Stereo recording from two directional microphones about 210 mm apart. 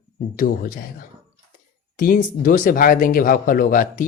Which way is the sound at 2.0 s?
40° left (ahead or behind).